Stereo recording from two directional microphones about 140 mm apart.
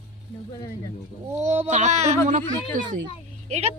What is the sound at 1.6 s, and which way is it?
Speech, 60° right (ahead or behind).